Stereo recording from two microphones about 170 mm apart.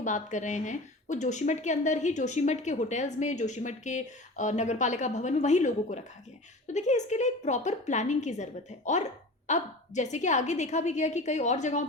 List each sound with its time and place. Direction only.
0.0 s speech: 45° left (ahead or behind)